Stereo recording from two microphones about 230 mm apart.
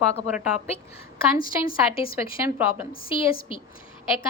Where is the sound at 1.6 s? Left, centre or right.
Left.